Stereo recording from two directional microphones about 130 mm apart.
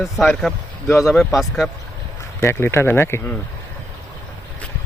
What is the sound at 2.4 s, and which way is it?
Speech, 20° left (ahead or behind).